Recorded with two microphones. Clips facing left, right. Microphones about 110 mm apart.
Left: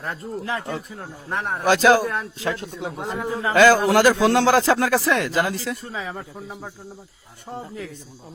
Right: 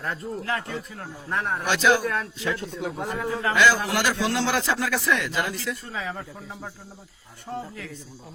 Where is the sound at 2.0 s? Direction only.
20° left (ahead or behind).